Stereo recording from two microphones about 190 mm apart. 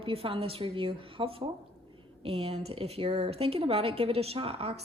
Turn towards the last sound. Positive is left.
turn(degrees=-30)  # may be behind; listen again after turning